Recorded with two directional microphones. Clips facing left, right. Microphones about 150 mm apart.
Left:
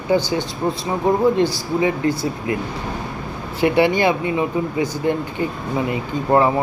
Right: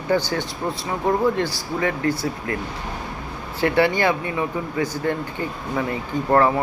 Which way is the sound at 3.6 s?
15° left (ahead or behind).